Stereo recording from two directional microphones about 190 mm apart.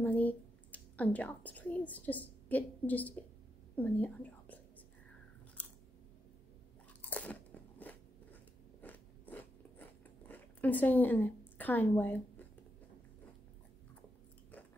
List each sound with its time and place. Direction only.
0.0 s a woman's voice: 10° left (ahead or behind)
7.0 s crunch: 10° left (ahead or behind)
8.8 s biting: 10° left (ahead or behind)